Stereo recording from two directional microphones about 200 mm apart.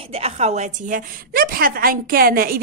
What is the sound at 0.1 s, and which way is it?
A woman's voice, 30° right (ahead or behind).